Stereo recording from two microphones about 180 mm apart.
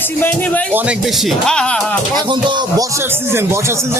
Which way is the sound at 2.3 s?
25° right (ahead or behind).